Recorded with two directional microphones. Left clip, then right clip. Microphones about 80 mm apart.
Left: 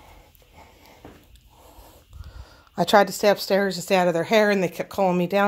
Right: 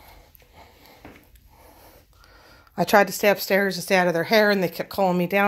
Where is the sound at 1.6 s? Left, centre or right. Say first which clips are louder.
Even; centre.